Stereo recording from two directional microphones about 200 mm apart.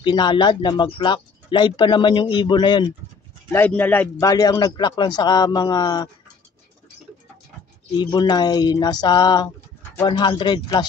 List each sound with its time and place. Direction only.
0.0 s speech: 20° left (ahead or behind)
3.5 s speech: 10° left (ahead or behind)
8.0 s speech: 20° left (ahead or behind)